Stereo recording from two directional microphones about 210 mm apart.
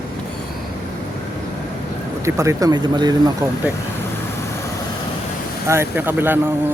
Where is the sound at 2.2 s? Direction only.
15° right (ahead or behind).